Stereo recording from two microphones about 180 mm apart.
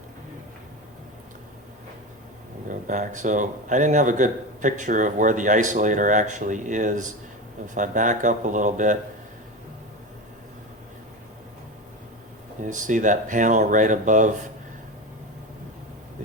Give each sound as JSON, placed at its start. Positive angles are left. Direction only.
{"t": 2.6, "sound": "speech", "side_deg": -45}
{"t": 12.6, "sound": "speech", "side_deg": -45}